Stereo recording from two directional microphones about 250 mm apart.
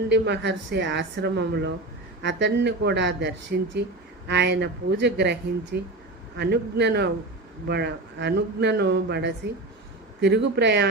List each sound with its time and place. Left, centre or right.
0.1 s a man's voice: right